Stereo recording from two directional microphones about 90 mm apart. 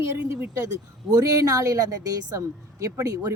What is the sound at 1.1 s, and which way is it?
Speech, 35° right (ahead or behind).